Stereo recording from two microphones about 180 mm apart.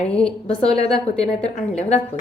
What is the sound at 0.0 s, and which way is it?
A woman's voice, 5° left (ahead or behind).